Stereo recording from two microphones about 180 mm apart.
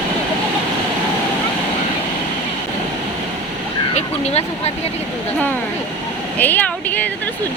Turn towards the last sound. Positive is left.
turn(degrees=10)  # may be behind; listen again after turning